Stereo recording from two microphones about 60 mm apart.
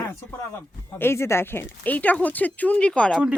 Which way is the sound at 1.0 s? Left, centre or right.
Left.